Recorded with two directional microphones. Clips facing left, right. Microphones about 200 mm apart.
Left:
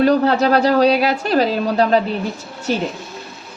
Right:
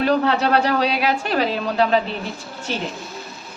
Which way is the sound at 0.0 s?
40° left (ahead or behind).